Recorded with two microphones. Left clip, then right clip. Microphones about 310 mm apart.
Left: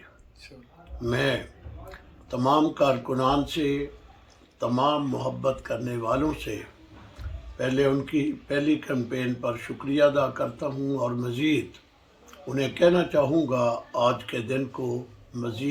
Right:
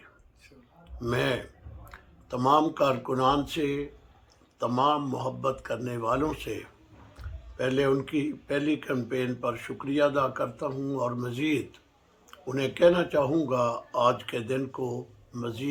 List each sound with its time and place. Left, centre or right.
0.9 s speech: centre
7.5 s speech: centre